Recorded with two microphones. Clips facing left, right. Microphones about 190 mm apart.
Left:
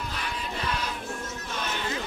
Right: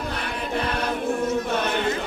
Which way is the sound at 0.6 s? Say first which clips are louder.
Right 7 dB; 60° right (ahead or behind).